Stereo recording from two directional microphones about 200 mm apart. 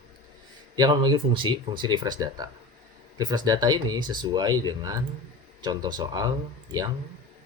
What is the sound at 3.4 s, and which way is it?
Speech, 20° right (ahead or behind).